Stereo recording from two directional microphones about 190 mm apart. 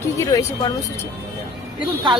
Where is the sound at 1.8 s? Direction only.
25° right (ahead or behind).